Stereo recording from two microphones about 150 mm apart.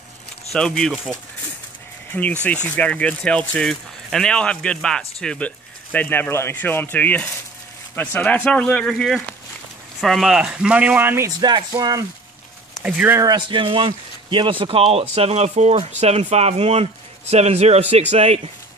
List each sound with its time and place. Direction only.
0.5 s speech: 5° left (ahead or behind)
2.4 s speech: 10° left (ahead or behind); by 11.2 s 15° right (ahead or behind)
11.2 s speech: 30° right (ahead or behind)
12.8 s speech: 10° right (ahead or behind)
13.2 s speech: 30° right (ahead or behind); by 18.4 s 45° right (ahead or behind)